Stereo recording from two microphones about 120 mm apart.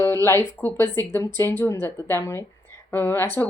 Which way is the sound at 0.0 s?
20° left (ahead or behind).